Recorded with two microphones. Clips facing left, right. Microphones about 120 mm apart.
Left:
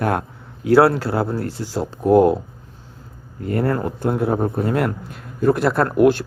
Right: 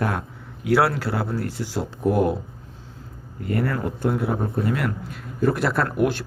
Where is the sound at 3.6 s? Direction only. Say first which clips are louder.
Left 4 dB; 45° left (ahead or behind).